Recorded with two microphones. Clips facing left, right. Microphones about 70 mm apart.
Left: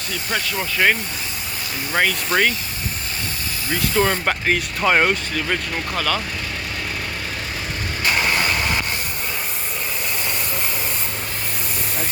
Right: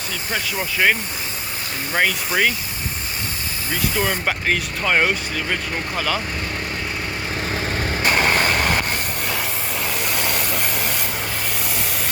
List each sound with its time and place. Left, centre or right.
0.3 s speech: centre
2.0 s speech: centre
4.0 s speech: centre
6.0 s speech: centre
8.0 s vehicle: right
10.1 s vehicle: right